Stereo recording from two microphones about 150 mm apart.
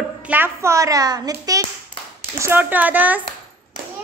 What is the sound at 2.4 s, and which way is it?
Speech, 15° right (ahead or behind).